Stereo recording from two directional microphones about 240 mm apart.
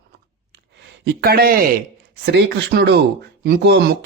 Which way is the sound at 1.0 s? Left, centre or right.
Right.